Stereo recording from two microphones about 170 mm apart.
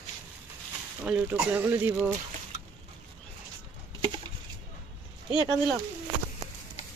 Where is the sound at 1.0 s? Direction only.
5° right (ahead or behind).